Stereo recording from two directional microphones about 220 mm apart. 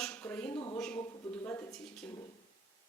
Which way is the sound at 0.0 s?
5° left (ahead or behind).